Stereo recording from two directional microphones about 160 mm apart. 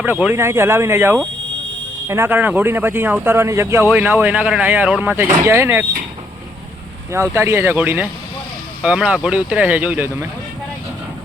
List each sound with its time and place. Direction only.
0.0 s speech: 10° right (ahead or behind)
3.8 s speech: 5° right (ahead or behind)
7.1 s speech: 15° right (ahead or behind)